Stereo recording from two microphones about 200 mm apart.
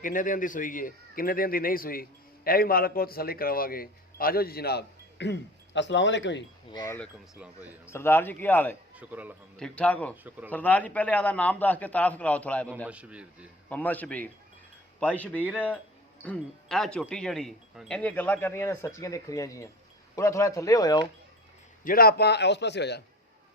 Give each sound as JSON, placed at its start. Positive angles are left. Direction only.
{"t": 0.0, "sound": "a man's voice", "side_deg": 40}
{"t": 6.7, "sound": "speech", "side_deg": 15}
{"t": 7.3, "sound": "a man's voice", "side_deg": -5}
{"t": 7.9, "sound": "speech", "side_deg": 10}
{"t": 9.0, "sound": "a man's voice", "side_deg": -10}
{"t": 9.6, "sound": "speech", "side_deg": 5}
{"t": 12.9, "sound": "a man's voice", "side_deg": -5}
{"t": 13.7, "sound": "speech", "side_deg": 5}
{"t": 21.8, "sound": "a man's voice", "side_deg": 50}